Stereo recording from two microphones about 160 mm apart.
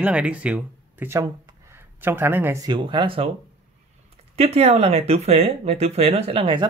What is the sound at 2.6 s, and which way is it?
Speech, 30° right (ahead or behind).